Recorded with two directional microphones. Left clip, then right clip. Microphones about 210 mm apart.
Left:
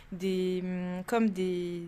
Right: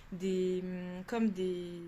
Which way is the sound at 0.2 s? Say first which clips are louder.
Left 2 dB; 25° left (ahead or behind).